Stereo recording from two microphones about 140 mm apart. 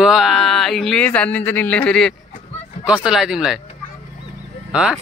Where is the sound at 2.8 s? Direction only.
5° right (ahead or behind).